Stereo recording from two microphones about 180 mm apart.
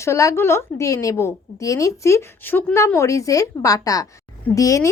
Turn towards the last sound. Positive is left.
turn(degrees=20)  # may be behind; listen again after turning